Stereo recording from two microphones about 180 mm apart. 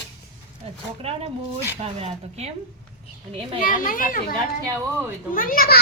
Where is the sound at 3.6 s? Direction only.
50° left (ahead or behind).